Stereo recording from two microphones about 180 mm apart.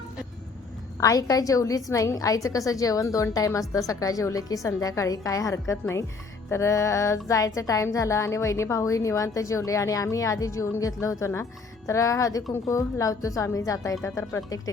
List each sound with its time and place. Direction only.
0.9 s a woman's voice: 20° left (ahead or behind)
6.5 s music: 15° left (ahead or behind)